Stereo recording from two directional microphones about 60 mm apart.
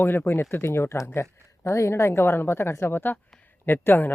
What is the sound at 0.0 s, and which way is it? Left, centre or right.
Speech, left.